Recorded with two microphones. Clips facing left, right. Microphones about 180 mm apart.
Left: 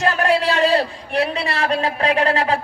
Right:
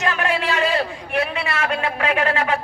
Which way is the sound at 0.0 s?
35° left (ahead or behind).